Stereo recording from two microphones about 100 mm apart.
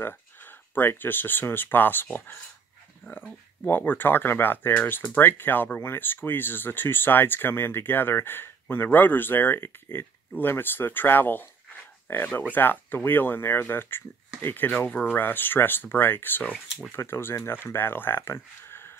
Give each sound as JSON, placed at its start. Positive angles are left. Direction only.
{"t": 0.0, "sound": "speech", "side_deg": 20}